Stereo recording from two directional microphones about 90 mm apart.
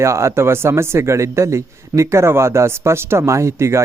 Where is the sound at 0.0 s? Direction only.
30° right (ahead or behind).